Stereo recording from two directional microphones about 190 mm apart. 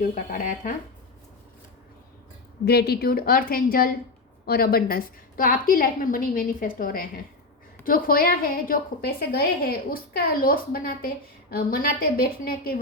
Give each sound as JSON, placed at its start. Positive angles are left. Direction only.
{"t": 0.0, "sound": "a woman's voice", "side_deg": 45}
{"t": 2.6, "sound": "a woman's voice", "side_deg": 55}